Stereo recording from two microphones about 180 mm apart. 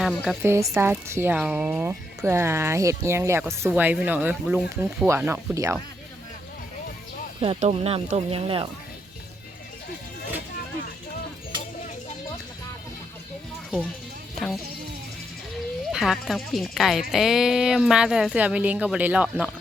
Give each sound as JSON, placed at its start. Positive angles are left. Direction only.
{"t": 0.3, "sound": "speech", "side_deg": -15}
{"t": 7.4, "sound": "speech", "side_deg": -35}
{"t": 14.3, "sound": "music", "side_deg": 0}
{"t": 15.9, "sound": "speech", "side_deg": 0}